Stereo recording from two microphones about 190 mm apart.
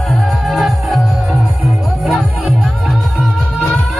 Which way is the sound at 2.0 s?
Centre (ahead or behind).